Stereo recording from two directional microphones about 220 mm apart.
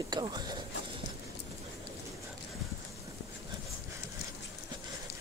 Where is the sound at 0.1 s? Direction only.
20° right (ahead or behind).